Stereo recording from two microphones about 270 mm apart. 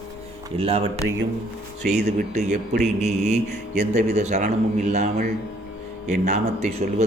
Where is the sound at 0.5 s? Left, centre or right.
Right.